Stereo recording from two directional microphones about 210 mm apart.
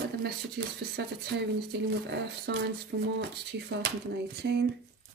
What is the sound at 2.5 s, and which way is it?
Speech, 55° right (ahead or behind).